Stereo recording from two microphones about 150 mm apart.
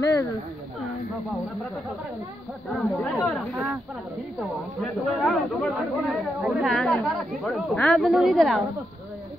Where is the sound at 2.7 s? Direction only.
Centre (ahead or behind).